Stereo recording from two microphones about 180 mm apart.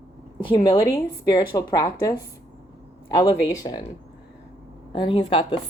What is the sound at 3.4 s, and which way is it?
Speech, 25° left (ahead or behind).